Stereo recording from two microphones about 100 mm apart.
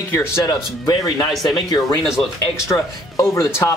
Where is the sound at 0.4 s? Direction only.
40° left (ahead or behind).